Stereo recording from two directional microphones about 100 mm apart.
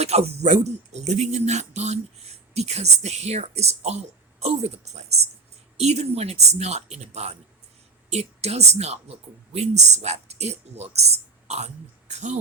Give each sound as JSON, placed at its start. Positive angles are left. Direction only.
{"t": 0.0, "sound": "speech", "side_deg": -90}